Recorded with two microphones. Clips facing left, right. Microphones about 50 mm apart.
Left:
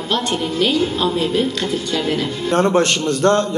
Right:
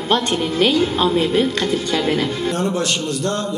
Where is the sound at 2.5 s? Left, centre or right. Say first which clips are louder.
Left 5 dB; left.